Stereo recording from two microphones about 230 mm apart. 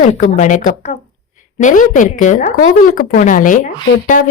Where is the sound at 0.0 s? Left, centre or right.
Left.